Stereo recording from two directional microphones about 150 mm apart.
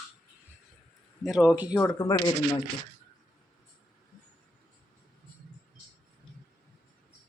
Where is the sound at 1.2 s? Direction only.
5° right (ahead or behind).